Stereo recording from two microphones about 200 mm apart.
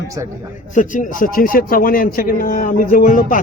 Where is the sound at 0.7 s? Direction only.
40° left (ahead or behind).